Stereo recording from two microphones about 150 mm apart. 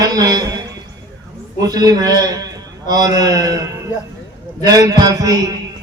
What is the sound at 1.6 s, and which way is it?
A man's voice, 25° right (ahead or behind).